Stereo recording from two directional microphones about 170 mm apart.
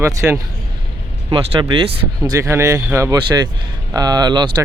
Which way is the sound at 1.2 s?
30° right (ahead or behind).